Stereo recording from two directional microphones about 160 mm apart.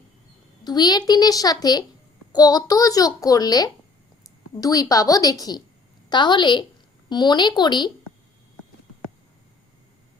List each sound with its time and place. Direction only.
0.6 s a child's voice: 25° left (ahead or behind)